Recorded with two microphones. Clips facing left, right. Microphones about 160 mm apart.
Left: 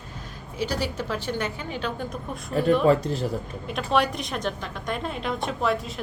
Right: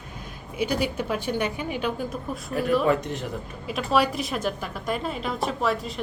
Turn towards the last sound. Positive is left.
turn(degrees=0)  # may be behind; listen again after turning